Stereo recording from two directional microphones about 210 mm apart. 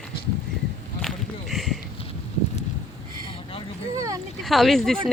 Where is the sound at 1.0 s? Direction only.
Centre (ahead or behind).